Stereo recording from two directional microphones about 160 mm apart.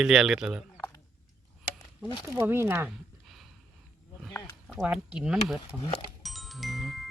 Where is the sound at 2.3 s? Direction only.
15° right (ahead or behind).